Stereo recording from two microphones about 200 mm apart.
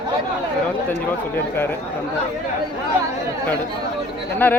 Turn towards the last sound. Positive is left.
turn(degrees=10)  # may be behind; listen again after turning